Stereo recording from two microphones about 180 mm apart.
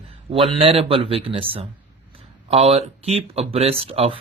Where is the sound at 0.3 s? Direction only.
30° right (ahead or behind).